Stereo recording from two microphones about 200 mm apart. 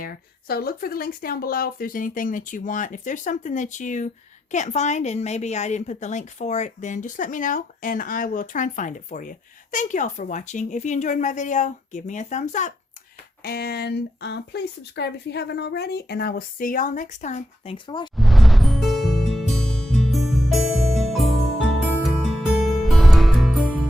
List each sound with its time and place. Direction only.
0.0 s a woman's voice: 50° left (ahead or behind)
13.4 s speech: 50° left (ahead or behind); by 17.7 s 35° left (ahead or behind)
17.8 s speech: 25° left (ahead or behind)
18.2 s music: centre (ahead or behind)